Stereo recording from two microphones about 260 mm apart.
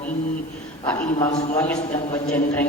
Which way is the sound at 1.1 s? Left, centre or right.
Centre.